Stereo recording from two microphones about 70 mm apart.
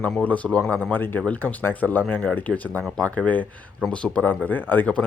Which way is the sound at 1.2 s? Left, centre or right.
Centre.